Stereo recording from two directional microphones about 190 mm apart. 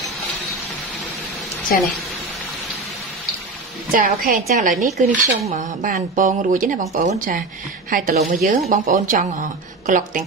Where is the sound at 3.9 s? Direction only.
50° right (ahead or behind).